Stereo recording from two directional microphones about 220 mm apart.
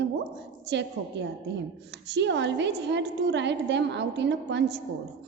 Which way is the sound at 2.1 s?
55° right (ahead or behind).